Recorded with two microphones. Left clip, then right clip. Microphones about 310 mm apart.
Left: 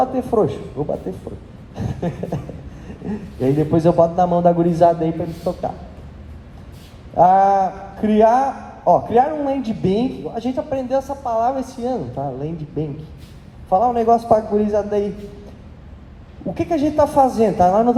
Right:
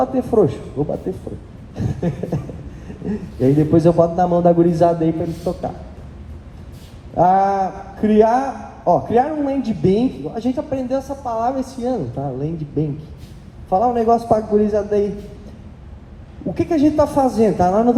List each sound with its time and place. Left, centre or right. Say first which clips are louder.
0.0 s a man's voice: right 1 dB; left
1.7 s a sound: right 1 dB; left
3.1 s a man's voice: right 2 dB; left
7.2 s a man's voice: left 2 dB; left
16.6 s a man's voice: right 1 dB; left